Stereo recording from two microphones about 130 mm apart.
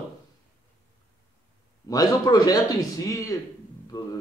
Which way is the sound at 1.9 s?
30° left (ahead or behind).